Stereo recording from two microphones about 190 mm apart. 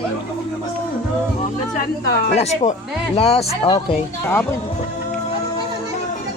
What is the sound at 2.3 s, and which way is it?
A woman's voice, 35° left (ahead or behind).